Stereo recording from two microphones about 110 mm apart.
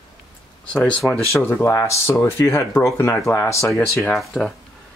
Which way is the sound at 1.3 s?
25° left (ahead or behind).